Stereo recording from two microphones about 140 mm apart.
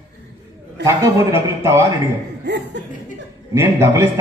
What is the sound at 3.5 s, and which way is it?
Speech, 20° right (ahead or behind).